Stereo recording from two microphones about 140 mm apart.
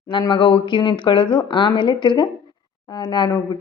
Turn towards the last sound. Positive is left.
turn(degrees=30)  # may be behind; listen again after turning